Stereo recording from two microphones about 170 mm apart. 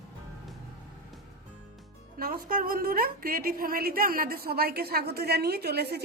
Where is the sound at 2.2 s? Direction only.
60° right (ahead or behind).